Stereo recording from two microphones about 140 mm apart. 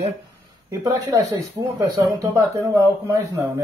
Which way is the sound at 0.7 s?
25° right (ahead or behind).